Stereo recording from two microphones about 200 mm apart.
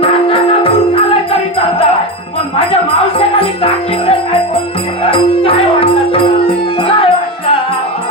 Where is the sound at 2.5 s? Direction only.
25° left (ahead or behind).